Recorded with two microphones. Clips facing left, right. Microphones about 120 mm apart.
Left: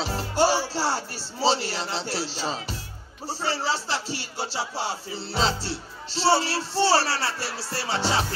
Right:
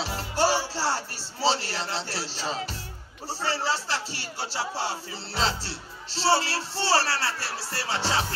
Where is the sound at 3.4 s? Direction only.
15° left (ahead or behind).